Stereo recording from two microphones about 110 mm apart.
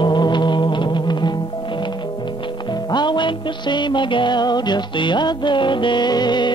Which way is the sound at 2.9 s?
45° left (ahead or behind).